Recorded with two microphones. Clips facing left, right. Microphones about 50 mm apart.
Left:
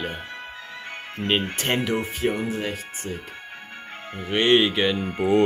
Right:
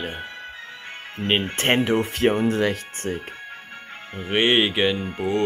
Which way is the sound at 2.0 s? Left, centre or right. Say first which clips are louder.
Right 4 dB; right.